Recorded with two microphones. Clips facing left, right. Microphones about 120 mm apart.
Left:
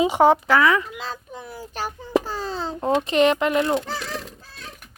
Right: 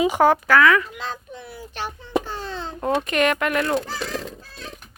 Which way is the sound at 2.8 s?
20° left (ahead or behind).